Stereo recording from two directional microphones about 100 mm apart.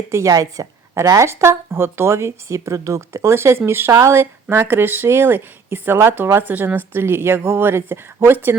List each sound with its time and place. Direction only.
0.1 s speech: 30° right (ahead or behind)